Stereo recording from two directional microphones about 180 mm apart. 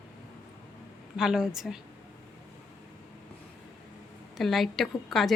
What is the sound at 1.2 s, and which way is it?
Speech, 5° right (ahead or behind).